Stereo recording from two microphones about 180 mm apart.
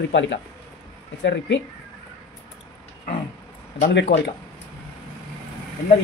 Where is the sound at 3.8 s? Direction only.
65° left (ahead or behind).